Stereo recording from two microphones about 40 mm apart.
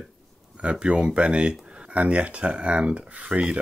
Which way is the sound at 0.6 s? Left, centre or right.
Right.